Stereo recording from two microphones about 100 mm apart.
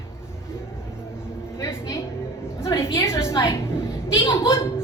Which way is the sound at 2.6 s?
30° left (ahead or behind).